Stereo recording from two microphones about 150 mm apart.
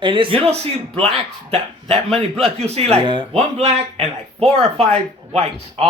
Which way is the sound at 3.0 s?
30° right (ahead or behind).